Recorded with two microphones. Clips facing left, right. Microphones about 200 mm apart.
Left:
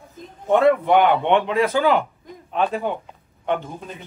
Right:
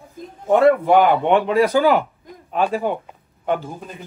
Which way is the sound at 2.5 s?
5° right (ahead or behind).